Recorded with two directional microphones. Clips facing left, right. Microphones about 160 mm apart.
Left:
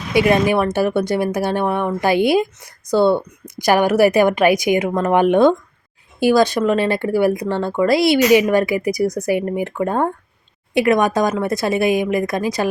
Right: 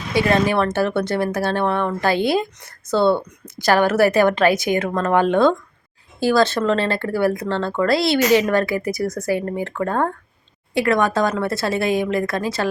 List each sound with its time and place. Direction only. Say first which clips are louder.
0.1 s speech: left 3 dB; 15° left (ahead or behind)